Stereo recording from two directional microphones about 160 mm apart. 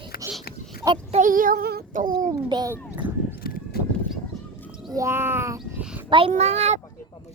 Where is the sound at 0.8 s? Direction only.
30° right (ahead or behind).